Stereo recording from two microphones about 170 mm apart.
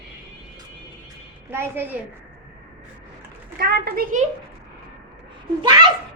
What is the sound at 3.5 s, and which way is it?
Speech, 65° right (ahead or behind).